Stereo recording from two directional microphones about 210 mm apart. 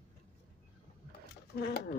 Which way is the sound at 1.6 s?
50° left (ahead or behind).